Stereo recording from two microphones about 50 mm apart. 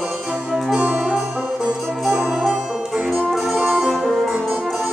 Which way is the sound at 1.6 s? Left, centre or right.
Centre.